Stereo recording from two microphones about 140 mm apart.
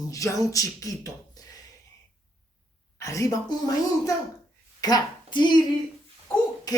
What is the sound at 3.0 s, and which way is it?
Speech, 25° left (ahead or behind).